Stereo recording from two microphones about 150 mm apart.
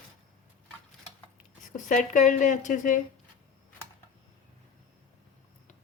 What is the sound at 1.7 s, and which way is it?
A woman's voice, 55° left (ahead or behind).